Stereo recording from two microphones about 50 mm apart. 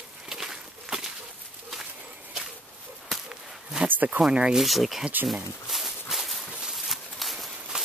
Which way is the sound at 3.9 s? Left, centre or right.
Right.